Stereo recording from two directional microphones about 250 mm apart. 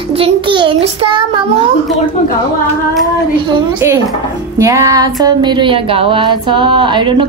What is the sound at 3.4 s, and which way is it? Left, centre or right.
A woman's voice, centre.